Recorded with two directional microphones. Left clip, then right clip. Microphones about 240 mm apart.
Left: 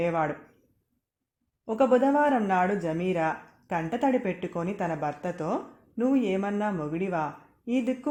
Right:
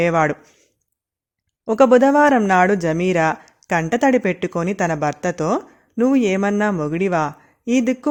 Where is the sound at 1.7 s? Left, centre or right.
Right.